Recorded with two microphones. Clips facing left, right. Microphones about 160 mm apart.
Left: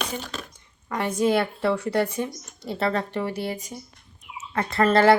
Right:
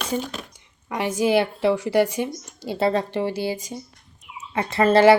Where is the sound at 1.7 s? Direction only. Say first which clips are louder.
Right 4 dB; 90° right.